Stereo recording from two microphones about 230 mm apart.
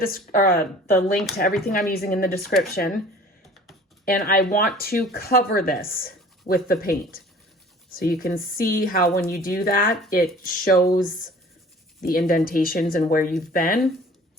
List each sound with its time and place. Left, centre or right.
0.0 s a woman's voice: left
4.0 s a woman's voice: left
12.3 s a woman's voice: left